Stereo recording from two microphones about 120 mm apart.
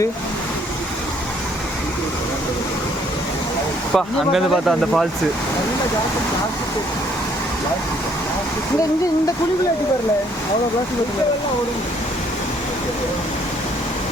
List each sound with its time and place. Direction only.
3.9 s speech: centre (ahead or behind)